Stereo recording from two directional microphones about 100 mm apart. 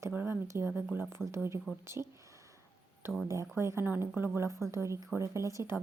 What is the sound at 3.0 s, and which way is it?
A woman's voice, 25° right (ahead or behind).